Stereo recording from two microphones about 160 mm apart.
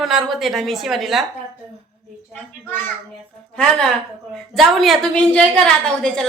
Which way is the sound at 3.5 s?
5° left (ahead or behind).